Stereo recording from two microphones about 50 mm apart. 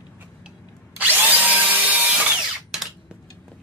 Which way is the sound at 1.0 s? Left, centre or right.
Right.